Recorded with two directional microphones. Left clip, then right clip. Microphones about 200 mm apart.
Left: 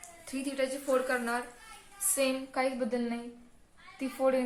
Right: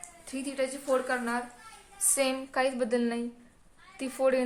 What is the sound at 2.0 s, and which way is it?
A woman's voice, 40° right (ahead or behind).